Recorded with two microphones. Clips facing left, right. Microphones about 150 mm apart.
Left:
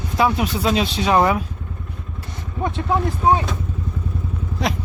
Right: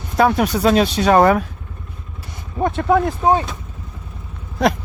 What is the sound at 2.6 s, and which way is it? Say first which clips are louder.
Speech: right 5 dB; 60° right (ahead or behind).